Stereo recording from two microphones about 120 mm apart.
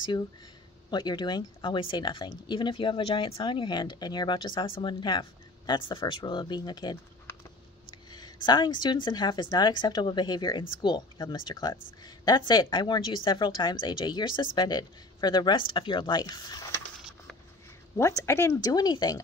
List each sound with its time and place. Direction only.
0.8 s speech: 40° left (ahead or behind)
8.1 s speech: 35° left (ahead or behind)
17.9 s speech: 20° left (ahead or behind)